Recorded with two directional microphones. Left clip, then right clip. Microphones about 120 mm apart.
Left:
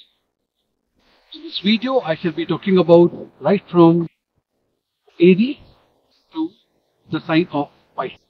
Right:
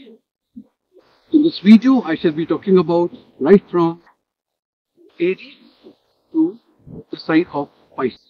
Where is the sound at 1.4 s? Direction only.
30° right (ahead or behind).